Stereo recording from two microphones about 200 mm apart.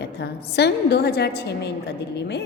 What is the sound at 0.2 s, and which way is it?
A woman's voice, 55° left (ahead or behind).